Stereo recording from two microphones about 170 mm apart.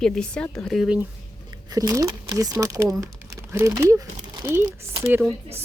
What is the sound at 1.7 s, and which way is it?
Speech, 20° right (ahead or behind).